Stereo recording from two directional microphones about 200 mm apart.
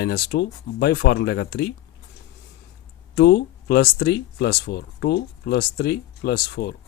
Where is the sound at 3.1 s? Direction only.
55° left (ahead or behind).